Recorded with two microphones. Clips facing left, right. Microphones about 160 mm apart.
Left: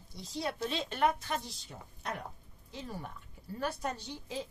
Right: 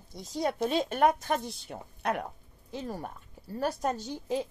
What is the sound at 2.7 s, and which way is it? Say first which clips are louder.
Speech: right 6 dB; 45° right (ahead or behind).